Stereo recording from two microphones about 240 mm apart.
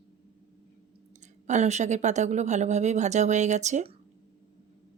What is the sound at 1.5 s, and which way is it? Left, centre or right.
Speech, right.